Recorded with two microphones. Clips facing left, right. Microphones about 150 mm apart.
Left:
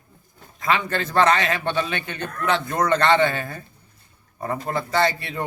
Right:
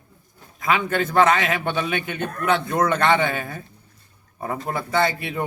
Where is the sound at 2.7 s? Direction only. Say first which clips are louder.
Left 2 dB; 5° right (ahead or behind).